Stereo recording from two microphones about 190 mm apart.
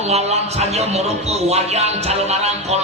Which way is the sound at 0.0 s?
35° right (ahead or behind).